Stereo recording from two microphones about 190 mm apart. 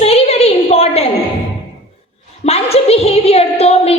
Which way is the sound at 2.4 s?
30° left (ahead or behind).